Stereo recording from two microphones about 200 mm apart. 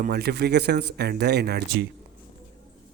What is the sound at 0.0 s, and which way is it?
Speech, 50° right (ahead or behind).